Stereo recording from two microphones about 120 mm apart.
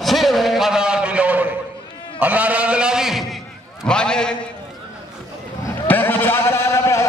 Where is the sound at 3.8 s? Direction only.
5° left (ahead or behind).